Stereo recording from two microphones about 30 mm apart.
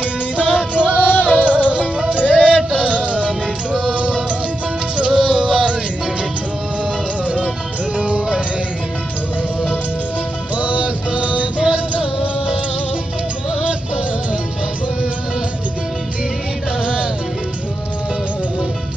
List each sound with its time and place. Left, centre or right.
0.0 s music: right
5.0 s music: right
10.5 s music: right
11.7 s music: right